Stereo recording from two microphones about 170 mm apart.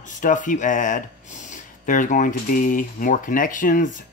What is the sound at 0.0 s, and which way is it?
Speech, 50° left (ahead or behind).